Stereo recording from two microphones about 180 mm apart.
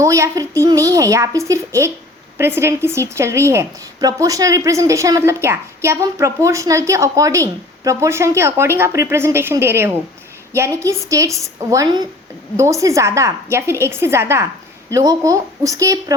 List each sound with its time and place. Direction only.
0.0 s a woman's voice: 15° right (ahead or behind)